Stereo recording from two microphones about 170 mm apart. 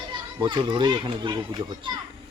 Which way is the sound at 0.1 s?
30° right (ahead or behind).